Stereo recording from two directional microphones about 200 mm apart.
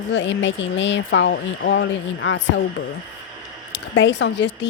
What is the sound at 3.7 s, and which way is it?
Speech, 65° left (ahead or behind).